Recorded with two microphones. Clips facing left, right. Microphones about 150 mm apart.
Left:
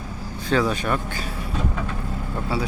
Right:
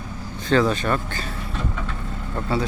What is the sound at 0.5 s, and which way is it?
Speech, 10° left (ahead or behind).